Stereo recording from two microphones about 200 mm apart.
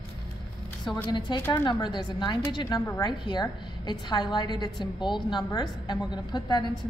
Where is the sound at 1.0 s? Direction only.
20° left (ahead or behind).